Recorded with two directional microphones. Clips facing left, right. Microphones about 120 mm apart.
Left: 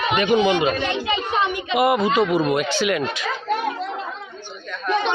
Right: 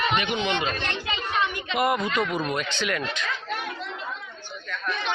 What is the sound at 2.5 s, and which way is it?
Speech, 10° left (ahead or behind).